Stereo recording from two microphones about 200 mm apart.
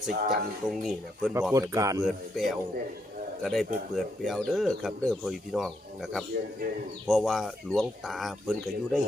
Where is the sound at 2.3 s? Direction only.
Centre (ahead or behind).